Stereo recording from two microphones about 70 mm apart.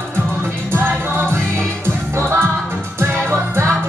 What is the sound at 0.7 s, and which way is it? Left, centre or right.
Music, right.